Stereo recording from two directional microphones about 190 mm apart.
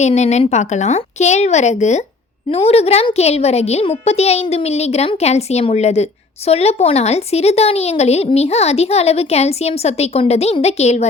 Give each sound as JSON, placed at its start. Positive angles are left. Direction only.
{"t": 0.0, "sound": "a woman's voice", "side_deg": 35}